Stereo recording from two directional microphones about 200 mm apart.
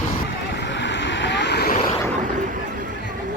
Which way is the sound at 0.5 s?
60° left (ahead or behind).